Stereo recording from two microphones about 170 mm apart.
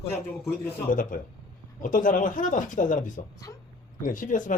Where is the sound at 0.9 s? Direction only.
50° left (ahead or behind).